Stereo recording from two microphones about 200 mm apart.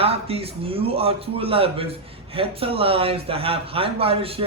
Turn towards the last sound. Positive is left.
turn(degrees=-30)  # may be behind; listen again after turning